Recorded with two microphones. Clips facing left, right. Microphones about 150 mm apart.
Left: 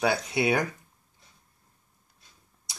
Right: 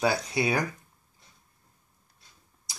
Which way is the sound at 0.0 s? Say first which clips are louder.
Left 1 dB; 5° left (ahead or behind).